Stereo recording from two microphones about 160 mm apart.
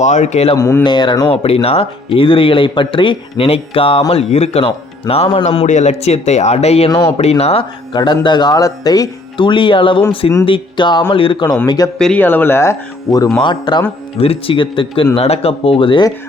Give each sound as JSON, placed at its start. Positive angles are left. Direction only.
{"t": 0.0, "sound": "speech", "side_deg": 45}
{"t": 0.5, "sound": "speech", "side_deg": 20}
{"t": 1.4, "sound": "speech", "side_deg": 40}
{"t": 5.5, "sound": "speech", "side_deg": 50}
{"t": 11.9, "sound": "speech", "side_deg": 5}